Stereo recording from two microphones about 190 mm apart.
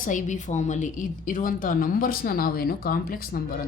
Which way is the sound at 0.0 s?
40° left (ahead or behind).